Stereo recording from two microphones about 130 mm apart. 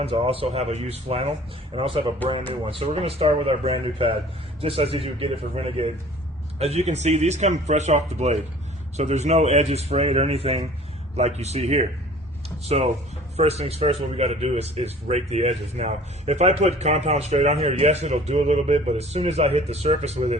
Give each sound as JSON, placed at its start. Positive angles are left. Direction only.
{"t": 0.0, "sound": "speech", "side_deg": -50}